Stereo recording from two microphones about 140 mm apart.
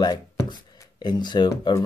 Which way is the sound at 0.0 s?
30° left (ahead or behind).